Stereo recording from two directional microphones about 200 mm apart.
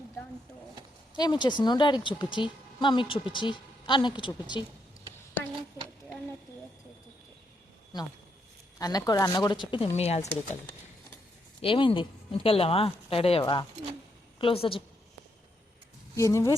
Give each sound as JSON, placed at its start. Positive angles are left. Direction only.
{"t": 1.1, "sound": "a woman's voice", "side_deg": 20}
{"t": 8.8, "sound": "a woman's voice", "side_deg": 20}
{"t": 11.6, "sound": "a woman's voice", "side_deg": 25}
{"t": 16.1, "sound": "speech", "side_deg": 15}